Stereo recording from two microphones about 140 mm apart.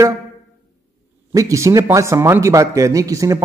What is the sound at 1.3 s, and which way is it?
Speech, 25° right (ahead or behind).